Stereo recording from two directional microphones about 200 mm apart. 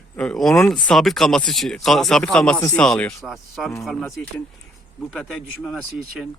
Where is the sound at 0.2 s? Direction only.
5° left (ahead or behind).